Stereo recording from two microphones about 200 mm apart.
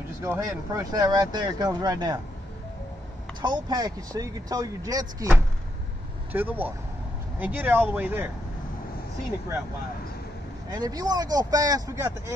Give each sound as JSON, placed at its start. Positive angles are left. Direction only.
{"t": 0.2, "sound": "speech", "side_deg": -15}
{"t": 3.4, "sound": "speech", "side_deg": -20}
{"t": 6.3, "sound": "speech", "side_deg": -10}
{"t": 10.7, "sound": "speech", "side_deg": -20}